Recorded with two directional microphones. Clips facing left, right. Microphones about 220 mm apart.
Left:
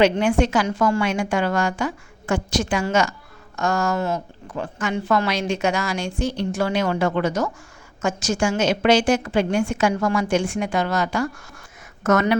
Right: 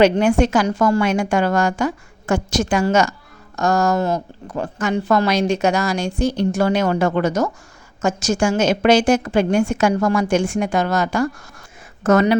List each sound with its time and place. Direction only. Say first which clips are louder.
0.0 s a woman's voice: right 3 dB; 40° right (ahead or behind)
12.0 s speech: right 4 dB; 30° right (ahead or behind)